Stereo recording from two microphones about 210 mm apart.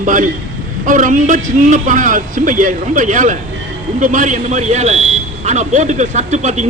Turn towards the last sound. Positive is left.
turn(degrees=-35)  # may be behind; listen again after turning